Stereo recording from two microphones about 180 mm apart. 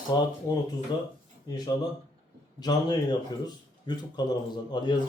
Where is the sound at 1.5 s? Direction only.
20° left (ahead or behind).